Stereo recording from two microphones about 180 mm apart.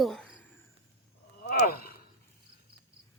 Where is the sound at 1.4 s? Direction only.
55° left (ahead or behind).